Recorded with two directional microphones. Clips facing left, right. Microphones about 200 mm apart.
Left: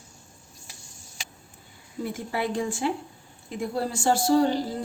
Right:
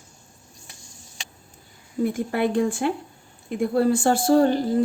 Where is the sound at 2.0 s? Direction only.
55° right (ahead or behind).